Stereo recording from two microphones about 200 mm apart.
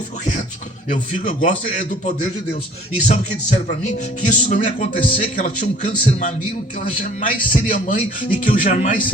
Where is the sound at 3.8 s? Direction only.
35° left (ahead or behind).